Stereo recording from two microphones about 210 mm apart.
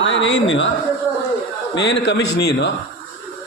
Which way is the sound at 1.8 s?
55° left (ahead or behind).